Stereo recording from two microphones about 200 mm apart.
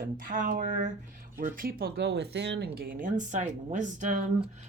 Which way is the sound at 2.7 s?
45° right (ahead or behind).